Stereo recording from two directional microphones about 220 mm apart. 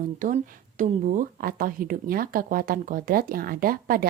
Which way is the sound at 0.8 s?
35° right (ahead or behind).